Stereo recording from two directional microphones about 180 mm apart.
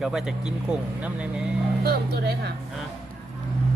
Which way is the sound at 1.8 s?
65° right (ahead or behind).